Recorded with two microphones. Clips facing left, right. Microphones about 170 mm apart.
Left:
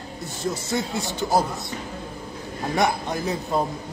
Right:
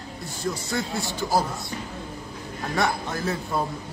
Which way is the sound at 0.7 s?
20° left (ahead or behind).